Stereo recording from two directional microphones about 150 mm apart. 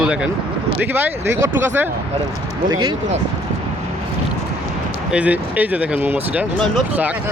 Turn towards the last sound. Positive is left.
turn(degrees=-10)  # may be behind; listen again after turning